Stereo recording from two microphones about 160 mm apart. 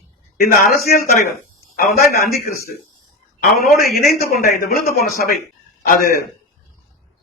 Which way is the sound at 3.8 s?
70° left (ahead or behind).